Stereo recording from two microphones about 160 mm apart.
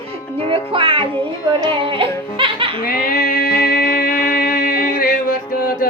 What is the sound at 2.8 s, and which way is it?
Music, 65° left (ahead or behind).